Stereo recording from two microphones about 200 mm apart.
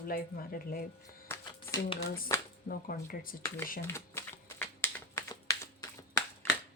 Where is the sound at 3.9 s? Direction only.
15° left (ahead or behind).